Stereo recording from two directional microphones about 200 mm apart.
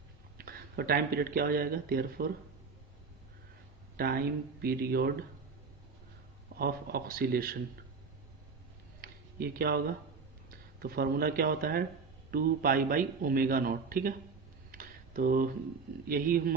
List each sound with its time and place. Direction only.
0.3 s speech: 50° right (ahead or behind)
3.9 s a man's voice: 50° right (ahead or behind)
6.6 s a man's voice: 50° right (ahead or behind)
9.0 s a sound: 50° right (ahead or behind)
10.8 s a man's voice: 50° right (ahead or behind)
14.7 s a sound: 45° right (ahead or behind)
16.0 s a man's voice: 45° right (ahead or behind)